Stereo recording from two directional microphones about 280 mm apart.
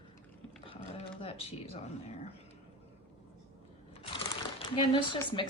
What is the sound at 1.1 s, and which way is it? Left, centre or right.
Speech, left.